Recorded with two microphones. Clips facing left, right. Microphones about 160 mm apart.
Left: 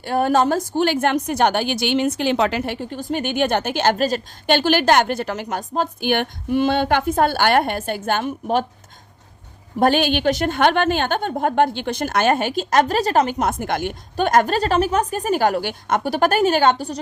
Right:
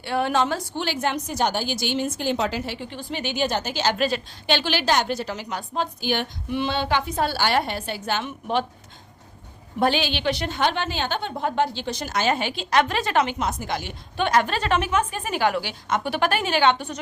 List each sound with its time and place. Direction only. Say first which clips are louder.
0.0 s a woman's voice: left 5 dB; 45° left (ahead or behind); by 2.7 s 65° left (ahead or behind)
2.7 s a woman's voice: left 7 dB; 45° left (ahead or behind)
3.9 s a woman's voice: left 3 dB; 40° left (ahead or behind)
9.7 s a woman's voice: left 5 dB; 50° left (ahead or behind)